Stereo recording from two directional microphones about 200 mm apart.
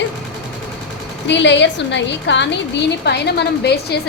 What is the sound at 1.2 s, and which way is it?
A woman's voice, 60° left (ahead or behind).